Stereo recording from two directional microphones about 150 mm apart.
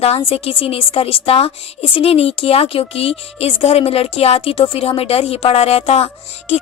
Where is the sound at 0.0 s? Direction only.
40° left (ahead or behind).